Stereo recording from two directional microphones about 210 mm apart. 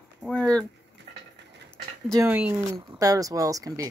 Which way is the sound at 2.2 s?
10° right (ahead or behind).